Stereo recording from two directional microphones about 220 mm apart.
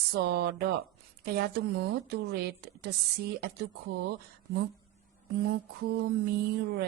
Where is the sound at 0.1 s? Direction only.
45° right (ahead or behind).